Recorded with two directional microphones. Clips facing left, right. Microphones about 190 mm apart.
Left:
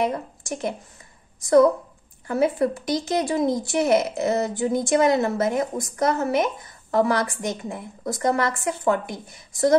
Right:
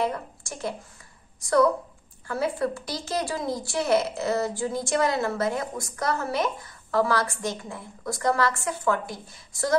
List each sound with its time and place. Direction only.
0.0 s speech: 20° left (ahead or behind)